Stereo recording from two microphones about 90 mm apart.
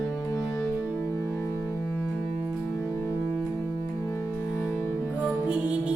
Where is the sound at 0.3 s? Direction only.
35° left (ahead or behind).